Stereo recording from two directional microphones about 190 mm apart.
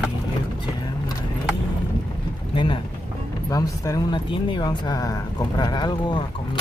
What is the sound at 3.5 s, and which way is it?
Speech, 20° left (ahead or behind).